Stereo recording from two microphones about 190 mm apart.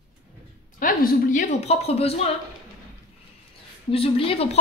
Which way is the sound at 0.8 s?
45° left (ahead or behind).